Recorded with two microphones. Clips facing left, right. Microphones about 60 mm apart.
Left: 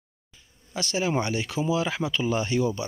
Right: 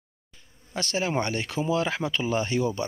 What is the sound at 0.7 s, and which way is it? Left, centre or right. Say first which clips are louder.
Speech: left 1 dB; right.